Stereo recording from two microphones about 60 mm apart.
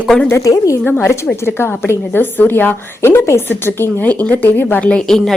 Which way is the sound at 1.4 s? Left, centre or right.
Left.